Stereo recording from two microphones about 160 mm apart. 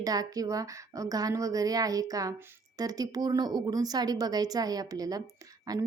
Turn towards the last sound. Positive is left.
turn(degrees=-20)  # may be behind; listen again after turning